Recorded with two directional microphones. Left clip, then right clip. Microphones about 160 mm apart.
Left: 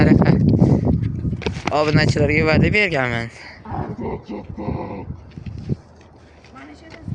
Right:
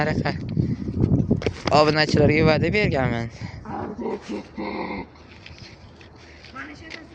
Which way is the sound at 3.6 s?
60° left (ahead or behind).